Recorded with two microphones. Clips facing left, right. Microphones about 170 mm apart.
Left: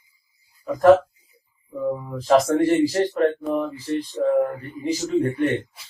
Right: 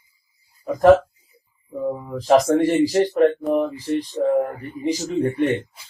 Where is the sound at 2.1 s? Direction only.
20° right (ahead or behind).